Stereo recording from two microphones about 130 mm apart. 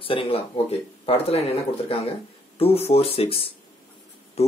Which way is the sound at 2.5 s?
50° left (ahead or behind).